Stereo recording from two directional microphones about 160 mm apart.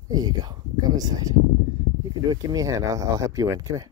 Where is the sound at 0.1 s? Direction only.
25° right (ahead or behind).